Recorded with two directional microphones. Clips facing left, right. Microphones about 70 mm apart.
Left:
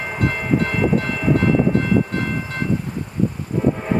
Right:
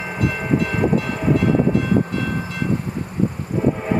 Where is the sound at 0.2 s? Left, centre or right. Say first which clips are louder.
Even; left.